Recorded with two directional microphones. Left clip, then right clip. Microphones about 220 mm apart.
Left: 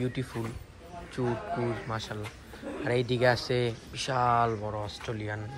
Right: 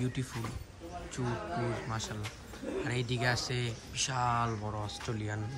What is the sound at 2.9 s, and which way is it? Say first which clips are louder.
Speech: left 9 dB; 10° right (ahead or behind).